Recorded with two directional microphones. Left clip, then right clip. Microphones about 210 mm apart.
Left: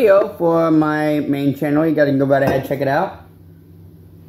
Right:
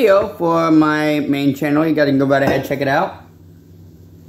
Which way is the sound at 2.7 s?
50° right (ahead or behind).